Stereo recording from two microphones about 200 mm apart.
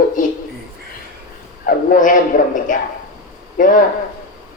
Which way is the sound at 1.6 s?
40° left (ahead or behind).